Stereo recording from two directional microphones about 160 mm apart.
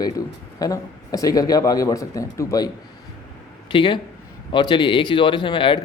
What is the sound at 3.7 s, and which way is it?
Speech, 30° left (ahead or behind).